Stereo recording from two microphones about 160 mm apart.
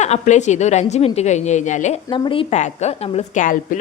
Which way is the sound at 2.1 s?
30° left (ahead or behind).